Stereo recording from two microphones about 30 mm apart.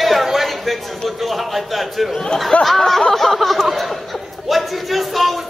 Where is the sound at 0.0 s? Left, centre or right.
Centre.